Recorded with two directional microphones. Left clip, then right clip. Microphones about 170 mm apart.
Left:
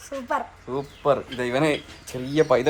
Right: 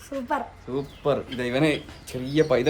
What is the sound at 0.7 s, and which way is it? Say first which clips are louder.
Speech: left 3 dB; 10° left (ahead or behind).